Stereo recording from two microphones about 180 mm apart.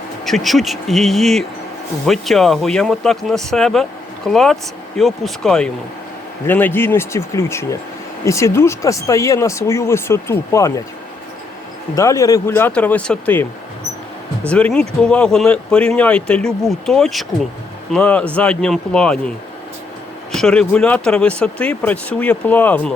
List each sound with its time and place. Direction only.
0.3 s speech: centre (ahead or behind)
11.9 s speech: 15° left (ahead or behind)
14.5 s speech: 5° left (ahead or behind)
20.3 s speech: 5° left (ahead or behind)